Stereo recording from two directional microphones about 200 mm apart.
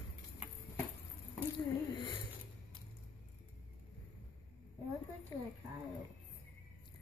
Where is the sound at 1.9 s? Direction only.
25° left (ahead or behind).